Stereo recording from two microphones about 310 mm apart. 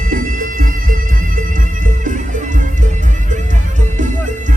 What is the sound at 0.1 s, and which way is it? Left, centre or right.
Music, right.